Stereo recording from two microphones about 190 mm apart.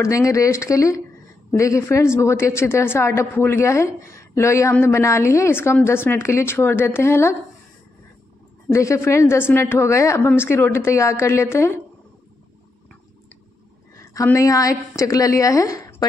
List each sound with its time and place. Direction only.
0.0 s a woman's voice: 15° left (ahead or behind)
8.7 s a woman's voice: 15° left (ahead or behind)
13.9 s a woman's voice: 15° left (ahead or behind)